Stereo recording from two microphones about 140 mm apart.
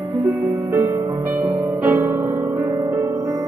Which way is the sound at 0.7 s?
20° right (ahead or behind).